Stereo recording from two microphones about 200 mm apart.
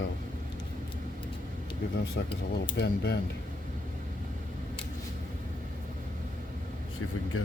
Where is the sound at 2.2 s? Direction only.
55° left (ahead or behind).